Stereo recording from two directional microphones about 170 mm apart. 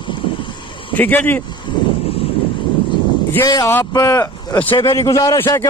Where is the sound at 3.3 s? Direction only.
20° left (ahead or behind).